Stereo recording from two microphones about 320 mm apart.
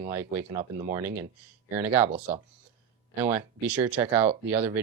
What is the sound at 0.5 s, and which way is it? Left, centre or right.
Speech, right.